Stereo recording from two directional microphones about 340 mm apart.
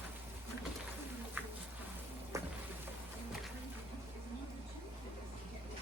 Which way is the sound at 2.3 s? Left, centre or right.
Centre.